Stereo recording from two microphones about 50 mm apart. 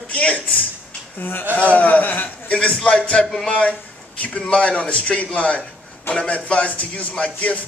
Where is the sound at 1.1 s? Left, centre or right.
Left.